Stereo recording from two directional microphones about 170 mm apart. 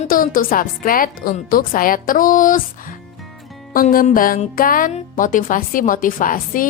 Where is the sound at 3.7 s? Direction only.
55° left (ahead or behind).